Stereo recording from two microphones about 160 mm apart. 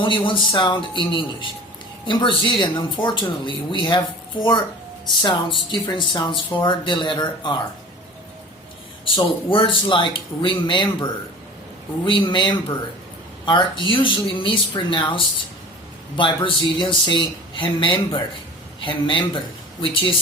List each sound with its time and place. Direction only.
0.0 s speech: 30° left (ahead or behind)
5.2 s speech: 30° left (ahead or behind)
9.1 s speech: 30° left (ahead or behind)